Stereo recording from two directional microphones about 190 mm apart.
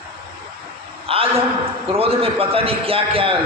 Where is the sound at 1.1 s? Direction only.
30° right (ahead or behind).